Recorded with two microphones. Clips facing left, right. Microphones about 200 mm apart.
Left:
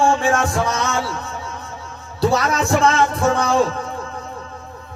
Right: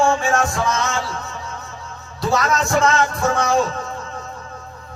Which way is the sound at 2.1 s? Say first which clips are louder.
Left 2 dB; 30° left (ahead or behind).